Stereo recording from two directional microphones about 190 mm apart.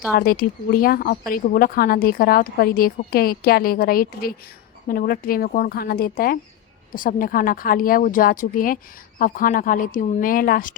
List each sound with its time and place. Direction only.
0.2 s speech: 50° left (ahead or behind)